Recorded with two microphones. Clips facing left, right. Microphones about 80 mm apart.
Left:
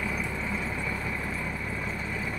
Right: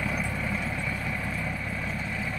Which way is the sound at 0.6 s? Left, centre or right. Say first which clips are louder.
Even; centre.